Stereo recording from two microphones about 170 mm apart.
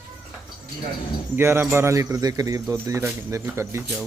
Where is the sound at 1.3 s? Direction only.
15° right (ahead or behind).